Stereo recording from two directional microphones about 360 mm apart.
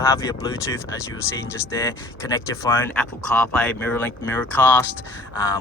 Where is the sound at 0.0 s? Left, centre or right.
Centre.